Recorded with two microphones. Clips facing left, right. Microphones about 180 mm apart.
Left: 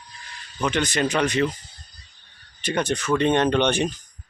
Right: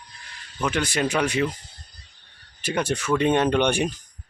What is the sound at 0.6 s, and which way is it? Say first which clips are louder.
Speech: left 1 dB; 5° right (ahead or behind).